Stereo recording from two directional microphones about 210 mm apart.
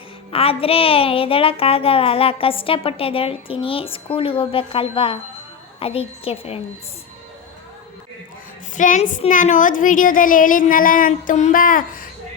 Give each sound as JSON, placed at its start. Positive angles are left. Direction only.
{"t": 0.3, "sound": "a woman's voice", "side_deg": 25}
{"t": 8.7, "sound": "a woman's voice", "side_deg": 35}